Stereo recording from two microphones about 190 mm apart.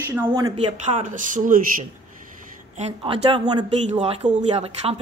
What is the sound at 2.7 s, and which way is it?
A woman's voice, 30° right (ahead or behind).